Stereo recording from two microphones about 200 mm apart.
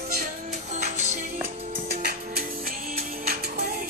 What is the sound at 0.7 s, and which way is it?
Music, 35° right (ahead or behind).